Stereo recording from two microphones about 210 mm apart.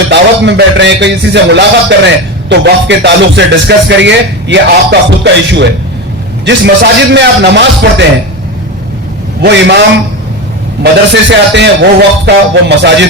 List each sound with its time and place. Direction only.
0.1 s music: 55° right (ahead or behind)
9.4 s a man's voice: 55° right (ahead or behind)
11.1 s music: 55° right (ahead or behind)